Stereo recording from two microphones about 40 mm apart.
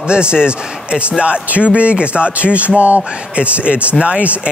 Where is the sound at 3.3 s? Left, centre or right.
Right.